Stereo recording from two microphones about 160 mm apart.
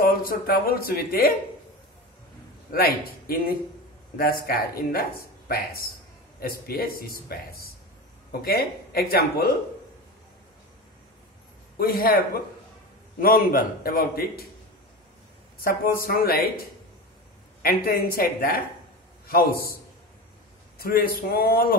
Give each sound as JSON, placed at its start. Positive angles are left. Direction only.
{"t": 0.0, "sound": "speech", "side_deg": 65}
{"t": 2.7, "sound": "speech", "side_deg": 70}
{"t": 11.8, "sound": "speech", "side_deg": 70}
{"t": 15.6, "sound": "a man's voice", "side_deg": 65}